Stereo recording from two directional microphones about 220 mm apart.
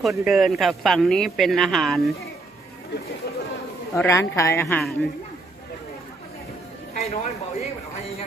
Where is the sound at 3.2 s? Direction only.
45° left (ahead or behind).